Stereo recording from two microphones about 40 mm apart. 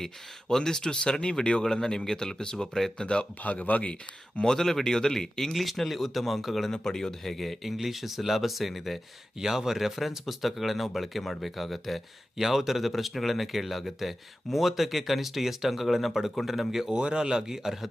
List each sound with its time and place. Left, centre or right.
0.0 s speech: centre
3.4 s speech: left
4.4 s speech: centre
6.7 s speech: centre
9.4 s speech: centre
16.9 s speech: right